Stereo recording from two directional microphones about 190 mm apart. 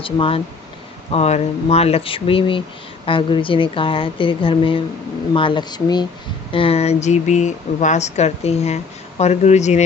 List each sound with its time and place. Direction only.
0.0 s a woman's voice: 30° left (ahead or behind)